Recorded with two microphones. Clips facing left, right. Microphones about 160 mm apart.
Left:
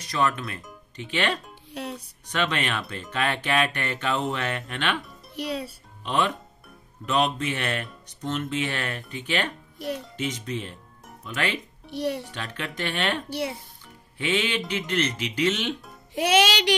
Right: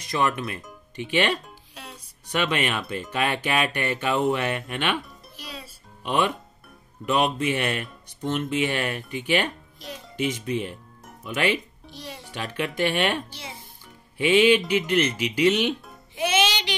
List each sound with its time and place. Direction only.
0.2 s speech: 20° right (ahead or behind)
1.7 s music: 65° left (ahead or behind)
2.3 s speech: 10° right (ahead or behind)
5.3 s a child's voice: 65° left (ahead or behind)
6.0 s speech: 10° right (ahead or behind)
9.8 s a child's voice: 60° left (ahead or behind)
10.1 s speech: 10° right (ahead or behind)
11.9 s music: 65° left (ahead or behind)
12.2 s speech: 10° right (ahead or behind)
13.3 s a child's voice: 65° left (ahead or behind)
14.1 s speech: 10° right (ahead or behind)
16.2 s music: 70° left (ahead or behind)